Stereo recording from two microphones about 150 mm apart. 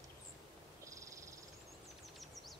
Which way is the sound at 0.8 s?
20° right (ahead or behind).